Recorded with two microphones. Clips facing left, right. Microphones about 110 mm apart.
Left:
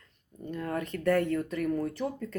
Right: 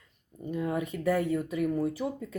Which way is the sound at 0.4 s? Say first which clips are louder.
Right 3 dB; 10° right (ahead or behind).